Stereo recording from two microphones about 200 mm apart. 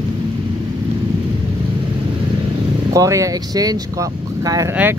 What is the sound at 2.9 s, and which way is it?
Speech, 15° right (ahead or behind).